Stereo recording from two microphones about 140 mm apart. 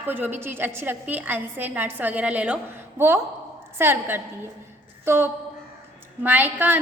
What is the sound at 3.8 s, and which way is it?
A woman's voice, 15° right (ahead or behind).